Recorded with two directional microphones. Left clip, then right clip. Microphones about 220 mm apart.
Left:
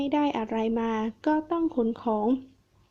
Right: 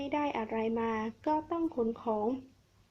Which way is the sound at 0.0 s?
40° left (ahead or behind).